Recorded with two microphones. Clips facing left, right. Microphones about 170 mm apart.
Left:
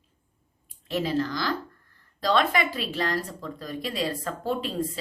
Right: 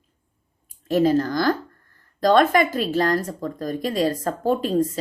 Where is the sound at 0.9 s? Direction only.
45° right (ahead or behind).